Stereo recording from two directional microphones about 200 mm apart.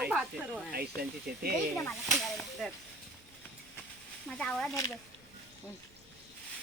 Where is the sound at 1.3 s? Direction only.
50° right (ahead or behind).